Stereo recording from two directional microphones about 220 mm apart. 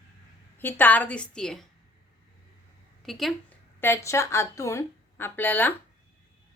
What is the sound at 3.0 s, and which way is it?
Speech, centre (ahead or behind).